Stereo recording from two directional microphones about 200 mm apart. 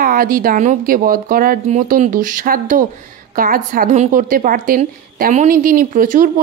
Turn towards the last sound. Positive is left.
turn(degrees=-40)  # may be behind; listen again after turning